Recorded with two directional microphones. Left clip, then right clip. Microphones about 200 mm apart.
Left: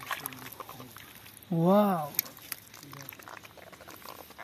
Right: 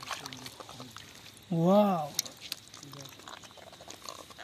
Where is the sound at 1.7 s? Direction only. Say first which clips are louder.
Even; 5° left (ahead or behind).